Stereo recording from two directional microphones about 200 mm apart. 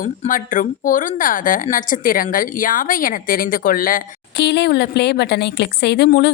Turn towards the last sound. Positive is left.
turn(degrees=55)  # may be behind; listen again after turning